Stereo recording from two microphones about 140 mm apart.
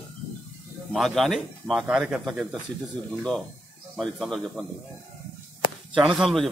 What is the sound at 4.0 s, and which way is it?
Speech, centre (ahead or behind).